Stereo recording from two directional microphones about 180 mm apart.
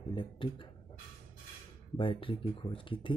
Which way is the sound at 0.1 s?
25° left (ahead or behind).